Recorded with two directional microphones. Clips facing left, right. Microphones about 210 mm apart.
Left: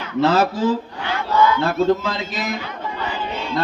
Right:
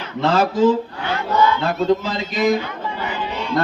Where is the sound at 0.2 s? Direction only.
5° left (ahead or behind).